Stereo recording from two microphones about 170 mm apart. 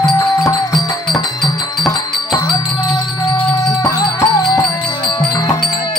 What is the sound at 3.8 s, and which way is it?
Music, 20° left (ahead or behind).